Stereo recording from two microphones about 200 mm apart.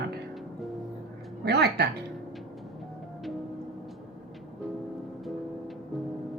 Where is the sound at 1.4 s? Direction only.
55° right (ahead or behind).